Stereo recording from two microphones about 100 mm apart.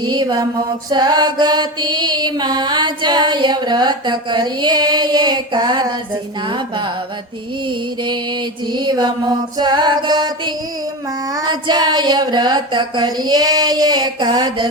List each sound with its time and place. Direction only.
0.0 s music: 50° right (ahead or behind)